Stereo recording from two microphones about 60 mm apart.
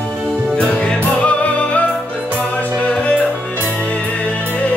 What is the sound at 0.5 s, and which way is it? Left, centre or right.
Music, centre.